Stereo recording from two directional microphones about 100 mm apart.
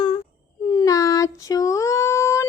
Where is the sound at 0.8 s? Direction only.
35° left (ahead or behind).